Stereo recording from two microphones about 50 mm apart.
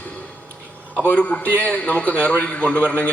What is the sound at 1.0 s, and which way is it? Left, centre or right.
A man's voice, left.